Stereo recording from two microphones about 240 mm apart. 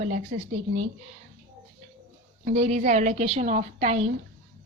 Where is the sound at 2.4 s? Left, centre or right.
Right.